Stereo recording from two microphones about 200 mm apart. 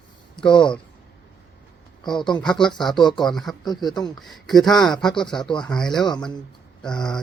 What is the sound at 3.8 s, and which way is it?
Speech, 20° left (ahead or behind).